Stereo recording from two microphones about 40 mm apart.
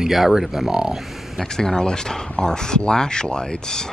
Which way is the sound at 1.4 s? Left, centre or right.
Centre.